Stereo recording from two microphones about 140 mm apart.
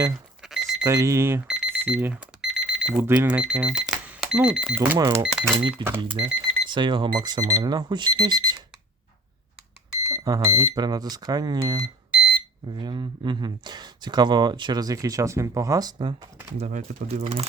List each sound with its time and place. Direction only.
0.4 s alarm clock: 5° right (ahead or behind)
0.9 s speech: 20° right (ahead or behind)
1.5 s alarm clock: 5° right (ahead or behind)
3.0 s speech: 15° right (ahead or behind)
6.0 s speech: 35° right (ahead or behind)
10.1 s speech: 25° right (ahead or behind)
16.6 s speech: 55° right (ahead or behind)